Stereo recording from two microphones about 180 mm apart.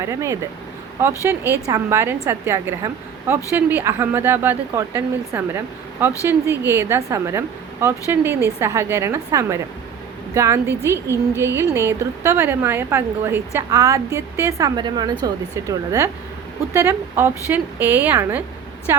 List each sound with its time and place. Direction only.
0.0 s a woman's voice: 15° right (ahead or behind)